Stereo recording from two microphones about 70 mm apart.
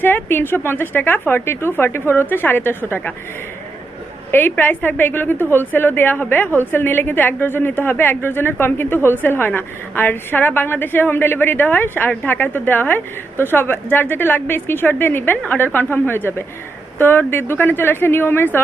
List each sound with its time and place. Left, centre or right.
0.0 s speech: left
4.3 s a woman's voice: left